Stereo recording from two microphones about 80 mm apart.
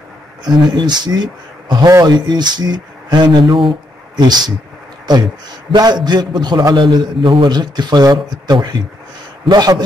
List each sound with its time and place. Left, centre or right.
0.5 s speech: right
4.2 s speech: right
5.7 s a man's voice: right